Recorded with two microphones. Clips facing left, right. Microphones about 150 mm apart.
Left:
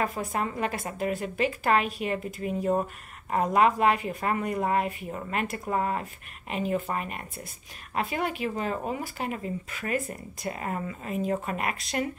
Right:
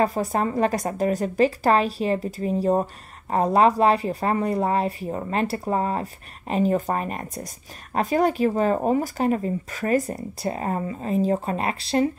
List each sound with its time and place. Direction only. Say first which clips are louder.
0.0 s speech: right 7 dB; 35° right (ahead or behind)